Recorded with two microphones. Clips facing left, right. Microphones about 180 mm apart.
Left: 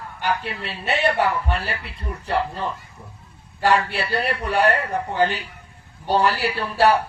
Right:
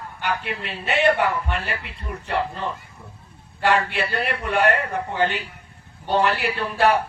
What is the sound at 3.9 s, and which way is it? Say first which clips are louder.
A man's voice: left 1 dB; 35° left (ahead or behind).